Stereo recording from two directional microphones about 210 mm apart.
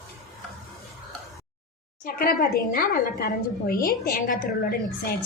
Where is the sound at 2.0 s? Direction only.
40° left (ahead or behind).